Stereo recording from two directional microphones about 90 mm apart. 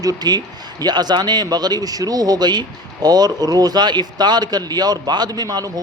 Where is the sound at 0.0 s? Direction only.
45° right (ahead or behind).